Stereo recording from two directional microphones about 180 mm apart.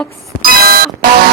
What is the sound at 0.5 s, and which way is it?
Alarm clock, 55° right (ahead or behind).